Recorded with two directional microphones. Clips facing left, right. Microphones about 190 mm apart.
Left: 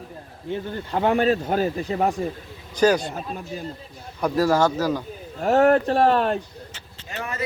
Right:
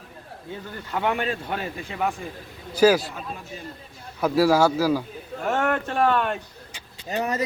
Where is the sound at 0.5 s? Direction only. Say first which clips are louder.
Left 5 dB; 25° left (ahead or behind).